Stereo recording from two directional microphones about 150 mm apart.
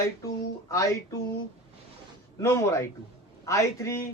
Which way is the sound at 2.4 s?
20° left (ahead or behind).